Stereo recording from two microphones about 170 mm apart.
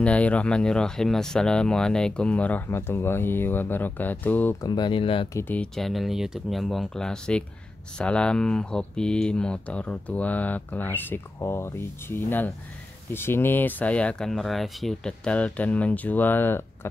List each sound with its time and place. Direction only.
0.0 s speech: 5° left (ahead or behind)
4.6 s speech: 25° left (ahead or behind)
5.3 s speech: 10° left (ahead or behind)